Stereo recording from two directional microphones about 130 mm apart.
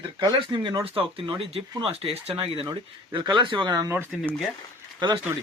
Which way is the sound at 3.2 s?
35° right (ahead or behind).